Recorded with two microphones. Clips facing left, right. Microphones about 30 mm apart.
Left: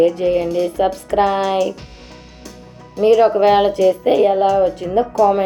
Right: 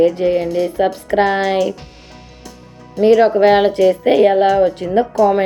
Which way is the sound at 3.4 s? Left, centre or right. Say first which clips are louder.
Right 3 dB; centre.